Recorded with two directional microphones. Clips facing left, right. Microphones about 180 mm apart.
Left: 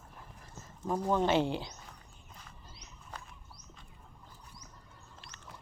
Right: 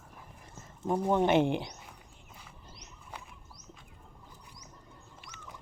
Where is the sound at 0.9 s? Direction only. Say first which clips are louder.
Right 3 dB; 25° right (ahead or behind).